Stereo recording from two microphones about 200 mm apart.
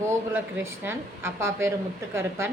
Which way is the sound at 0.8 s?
10° right (ahead or behind).